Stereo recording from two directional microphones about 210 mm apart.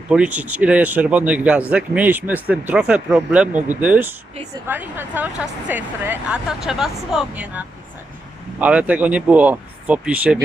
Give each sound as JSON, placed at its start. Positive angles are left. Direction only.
{"t": 0.1, "sound": "speech", "side_deg": -5}